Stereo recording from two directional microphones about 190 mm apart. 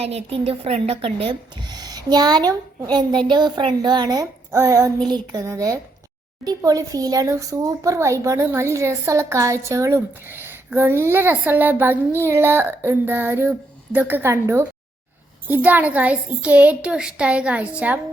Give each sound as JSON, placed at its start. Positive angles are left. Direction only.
{"t": 0.0, "sound": "a child's voice", "side_deg": -30}